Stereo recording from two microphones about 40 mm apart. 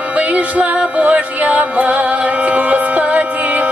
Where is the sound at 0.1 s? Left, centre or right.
Right.